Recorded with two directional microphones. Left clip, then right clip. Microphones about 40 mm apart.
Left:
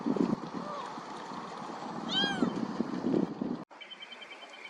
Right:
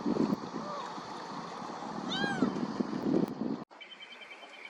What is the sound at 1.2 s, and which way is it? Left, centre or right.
Stream, centre.